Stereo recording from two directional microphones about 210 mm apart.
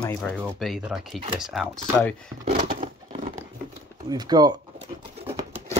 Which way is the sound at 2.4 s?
40° right (ahead or behind).